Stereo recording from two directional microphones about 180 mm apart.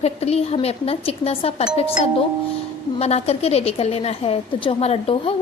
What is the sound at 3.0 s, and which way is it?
A woman's voice, 35° left (ahead or behind).